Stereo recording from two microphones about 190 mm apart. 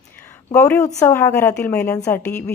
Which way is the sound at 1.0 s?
15° left (ahead or behind).